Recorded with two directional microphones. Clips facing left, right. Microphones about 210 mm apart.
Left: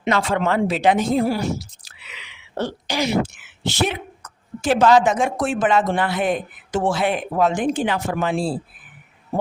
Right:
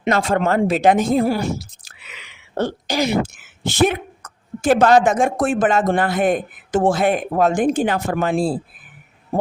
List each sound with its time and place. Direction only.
0.0 s speech: 45° right (ahead or behind)